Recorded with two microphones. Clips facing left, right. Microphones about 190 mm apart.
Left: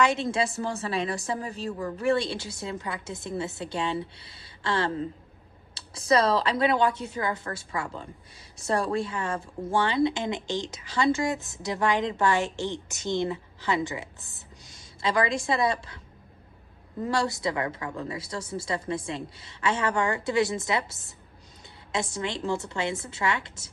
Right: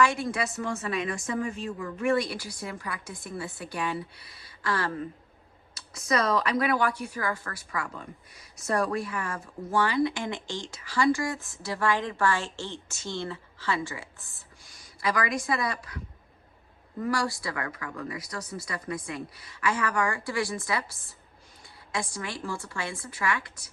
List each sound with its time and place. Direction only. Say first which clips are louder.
0.0 s speech: left 1 dB; 20° left (ahead or behind)
17.0 s speech: left 2 dB; 25° left (ahead or behind)